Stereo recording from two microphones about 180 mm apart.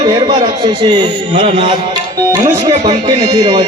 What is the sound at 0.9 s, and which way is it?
Speech, 40° right (ahead or behind).